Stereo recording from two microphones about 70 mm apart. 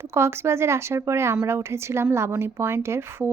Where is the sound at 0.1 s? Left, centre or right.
Right.